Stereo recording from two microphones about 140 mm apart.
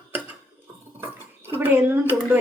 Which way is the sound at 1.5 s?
15° right (ahead or behind).